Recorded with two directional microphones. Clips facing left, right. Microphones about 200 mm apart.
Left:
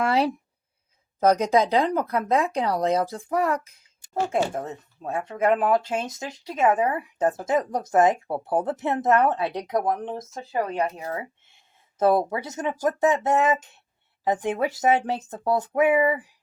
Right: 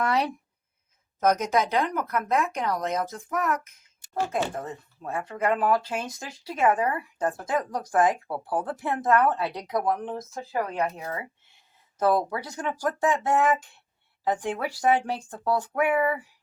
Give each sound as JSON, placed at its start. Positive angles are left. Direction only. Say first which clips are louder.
{"t": 0.0, "sound": "speech", "louder": "left 3 dB", "side_deg": 30}
{"t": 11.9, "sound": "speech", "louder": "left 3 dB", "side_deg": 25}
{"t": 16.0, "sound": "a sound", "louder": "left 3 dB", "side_deg": 15}